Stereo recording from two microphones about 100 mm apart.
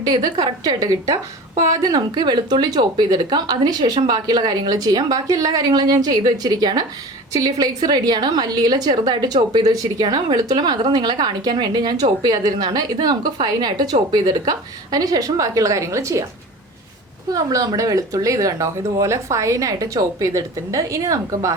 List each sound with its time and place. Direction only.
0.1 s a woman's voice: 45° right (ahead or behind)
17.3 s speech: 40° right (ahead or behind)